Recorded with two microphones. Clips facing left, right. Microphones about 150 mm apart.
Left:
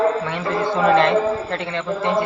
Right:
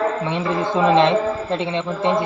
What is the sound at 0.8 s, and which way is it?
A woman's voice, 20° right (ahead or behind).